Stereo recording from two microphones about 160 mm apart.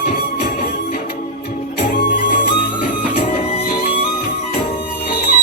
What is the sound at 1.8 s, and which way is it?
Music, 75° left (ahead or behind).